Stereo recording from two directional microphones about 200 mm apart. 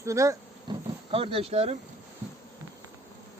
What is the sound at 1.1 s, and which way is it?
Speech, 30° right (ahead or behind).